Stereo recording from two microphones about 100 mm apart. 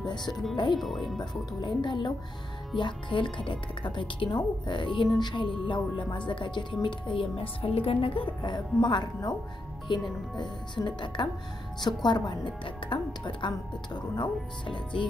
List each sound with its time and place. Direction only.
0.0 s music: 45° left (ahead or behind)
0.7 s speech: centre (ahead or behind)
1.6 s speech: 50° left (ahead or behind)
8.4 s speech: 50° left (ahead or behind)
10.8 s speech: 35° left (ahead or behind)
11.2 s speech: 50° left (ahead or behind)
12.6 s speech: 60° left (ahead or behind)